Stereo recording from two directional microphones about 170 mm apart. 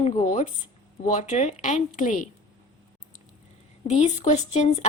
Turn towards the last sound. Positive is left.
turn(degrees=40)  # may be behind; listen again after turning